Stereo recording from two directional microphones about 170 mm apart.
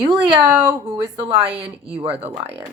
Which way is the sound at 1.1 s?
35° right (ahead or behind).